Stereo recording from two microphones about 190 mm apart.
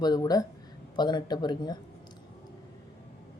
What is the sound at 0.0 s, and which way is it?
A woman's voice, 20° left (ahead or behind).